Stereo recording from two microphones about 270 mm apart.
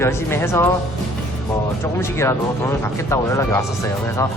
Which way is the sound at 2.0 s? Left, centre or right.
Centre.